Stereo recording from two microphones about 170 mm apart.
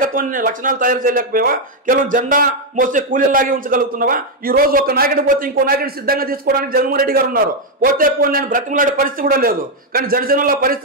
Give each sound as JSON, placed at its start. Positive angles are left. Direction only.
{"t": 0.0, "sound": "speech", "side_deg": -55}